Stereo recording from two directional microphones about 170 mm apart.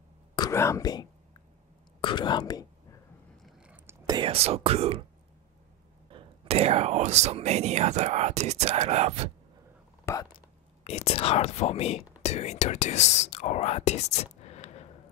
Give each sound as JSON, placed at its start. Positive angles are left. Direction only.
{"t": 0.4, "sound": "speech", "side_deg": 15}
{"t": 3.4, "sound": "a sound", "side_deg": -5}
{"t": 4.0, "sound": "whispering", "side_deg": -20}
{"t": 4.3, "sound": "speech", "side_deg": -35}
{"t": 6.0, "sound": "speech", "side_deg": -35}
{"t": 10.3, "sound": "speech", "side_deg": 40}